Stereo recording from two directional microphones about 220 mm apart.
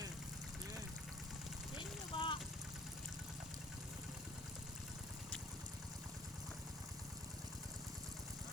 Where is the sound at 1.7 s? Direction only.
25° left (ahead or behind).